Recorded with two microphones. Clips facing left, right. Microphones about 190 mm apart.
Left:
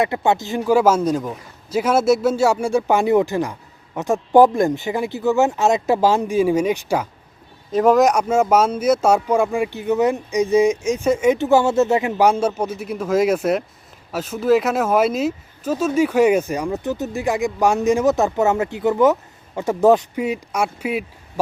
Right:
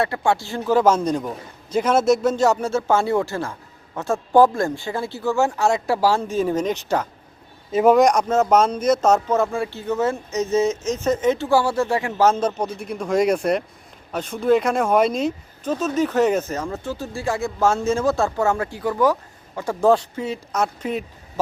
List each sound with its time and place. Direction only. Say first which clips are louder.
0.0 s speech: left 2 dB; 20° left (ahead or behind)
7.7 s speech: even; centre (ahead or behind)